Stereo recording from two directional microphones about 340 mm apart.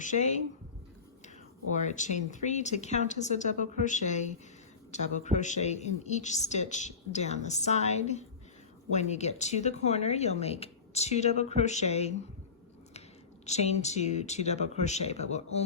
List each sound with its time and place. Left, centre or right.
0.0 s speech: left
1.7 s speech: left
13.4 s speech: centre